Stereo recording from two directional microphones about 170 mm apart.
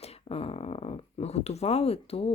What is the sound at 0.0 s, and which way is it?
Speech, 35° left (ahead or behind).